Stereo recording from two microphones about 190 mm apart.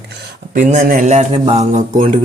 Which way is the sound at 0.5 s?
40° right (ahead or behind).